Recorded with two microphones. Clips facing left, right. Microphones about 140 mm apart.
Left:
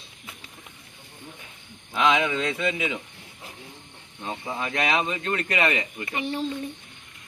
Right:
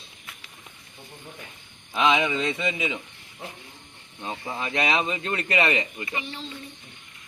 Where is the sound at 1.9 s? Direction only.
5° right (ahead or behind).